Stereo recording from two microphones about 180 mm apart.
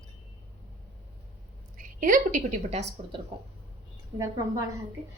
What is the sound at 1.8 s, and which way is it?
A woman's voice, 50° right (ahead or behind).